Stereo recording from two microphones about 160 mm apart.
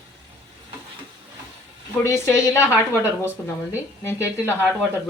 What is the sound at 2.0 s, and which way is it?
Speech, 20° left (ahead or behind).